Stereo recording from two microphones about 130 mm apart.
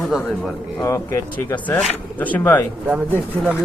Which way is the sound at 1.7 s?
5° left (ahead or behind).